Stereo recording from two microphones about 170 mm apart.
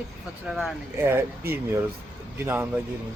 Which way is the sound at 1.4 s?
65° right (ahead or behind).